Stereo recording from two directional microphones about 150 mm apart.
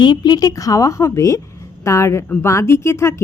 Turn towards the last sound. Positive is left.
turn(degrees=20)  # may be behind; listen again after turning